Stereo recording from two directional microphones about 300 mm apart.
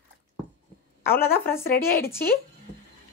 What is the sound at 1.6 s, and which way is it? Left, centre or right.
Speech, left.